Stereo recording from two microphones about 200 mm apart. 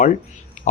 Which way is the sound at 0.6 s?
40° left (ahead or behind).